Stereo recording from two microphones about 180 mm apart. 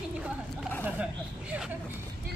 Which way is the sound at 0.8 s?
5° right (ahead or behind).